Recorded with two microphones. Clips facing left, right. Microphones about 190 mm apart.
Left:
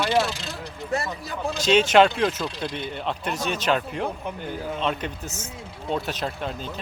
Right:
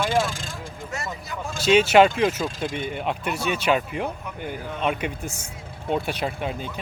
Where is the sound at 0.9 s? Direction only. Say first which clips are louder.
Left 6 dB; 35° left (ahead or behind).